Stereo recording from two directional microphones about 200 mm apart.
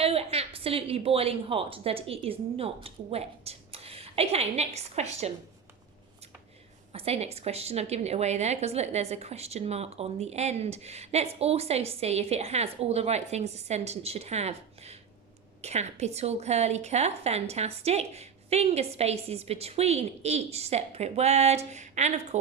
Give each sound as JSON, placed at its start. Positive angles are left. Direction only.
{"t": 0.0, "sound": "a woman's voice", "side_deg": -30}
{"t": 6.9, "sound": "a woman's voice", "side_deg": -30}